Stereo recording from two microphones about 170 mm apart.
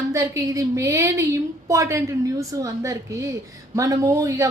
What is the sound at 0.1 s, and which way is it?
A woman's voice, 20° right (ahead or behind).